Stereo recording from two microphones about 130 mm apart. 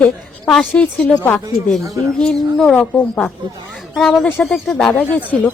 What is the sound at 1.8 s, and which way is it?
Speech, 25° right (ahead or behind).